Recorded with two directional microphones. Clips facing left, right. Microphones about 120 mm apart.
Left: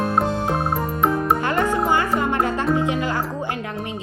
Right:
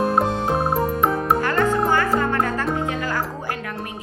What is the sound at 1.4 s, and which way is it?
Music, 20° left (ahead or behind).